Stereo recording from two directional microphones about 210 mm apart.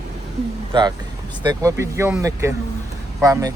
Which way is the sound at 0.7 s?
20° right (ahead or behind).